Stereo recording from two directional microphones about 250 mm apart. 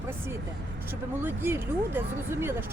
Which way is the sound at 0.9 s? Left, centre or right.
Centre.